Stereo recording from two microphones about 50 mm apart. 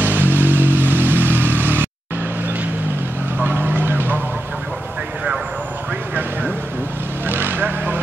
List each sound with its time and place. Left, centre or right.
0.0 s vehicle: right
3.4 s vehicle: right
7.2 s vehicle: right